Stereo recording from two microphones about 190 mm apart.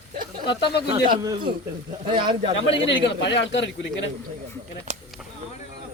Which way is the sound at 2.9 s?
65° left (ahead or behind).